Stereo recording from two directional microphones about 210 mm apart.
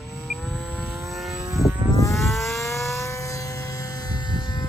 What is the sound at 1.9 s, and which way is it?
Vehicle, 15° left (ahead or behind).